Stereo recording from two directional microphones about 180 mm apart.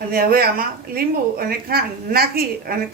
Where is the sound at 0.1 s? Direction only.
55° right (ahead or behind).